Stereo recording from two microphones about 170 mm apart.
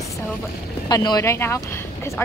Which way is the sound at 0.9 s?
20° left (ahead or behind).